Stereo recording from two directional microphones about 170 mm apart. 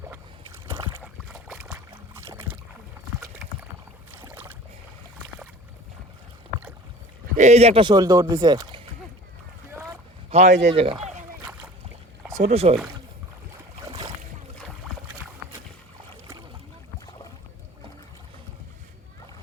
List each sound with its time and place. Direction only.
1.0 s boat: 5° right (ahead or behind)
1.5 s boat: 15° right (ahead or behind)
4.1 s boat: 15° right (ahead or behind)
7.3 s speech: 40° right (ahead or behind); by 8.8 s 25° right (ahead or behind)
10.2 s speech: 40° right (ahead or behind)
12.4 s speech: 40° right (ahead or behind)